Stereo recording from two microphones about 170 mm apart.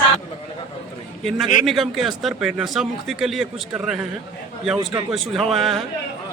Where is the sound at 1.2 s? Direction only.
Centre (ahead or behind).